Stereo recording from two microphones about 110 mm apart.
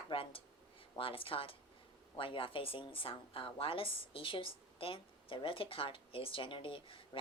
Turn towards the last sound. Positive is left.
turn(degrees=50)  # may be behind; listen again after turning